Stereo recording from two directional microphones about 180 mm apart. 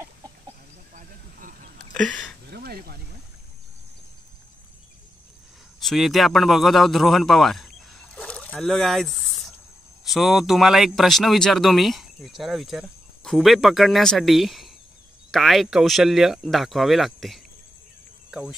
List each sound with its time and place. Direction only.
2.0 s speech: 5° left (ahead or behind)
2.5 s a sound: 60° right (ahead or behind)
5.8 s a man's voice: centre (ahead or behind)